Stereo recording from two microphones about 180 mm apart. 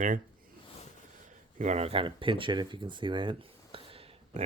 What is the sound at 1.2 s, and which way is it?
Speech, 40° right (ahead or behind).